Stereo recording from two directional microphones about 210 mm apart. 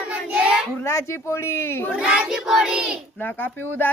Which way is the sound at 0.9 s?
15° left (ahead or behind).